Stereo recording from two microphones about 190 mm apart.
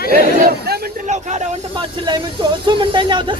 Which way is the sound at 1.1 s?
35° right (ahead or behind).